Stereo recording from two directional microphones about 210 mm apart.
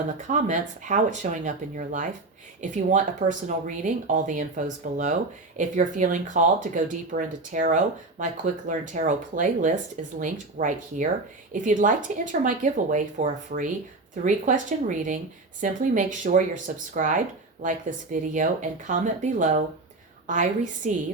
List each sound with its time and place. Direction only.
0.3 s speech: 35° right (ahead or behind)